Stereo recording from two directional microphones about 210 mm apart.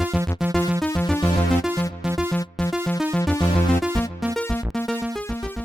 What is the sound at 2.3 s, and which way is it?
Music, 10° left (ahead or behind).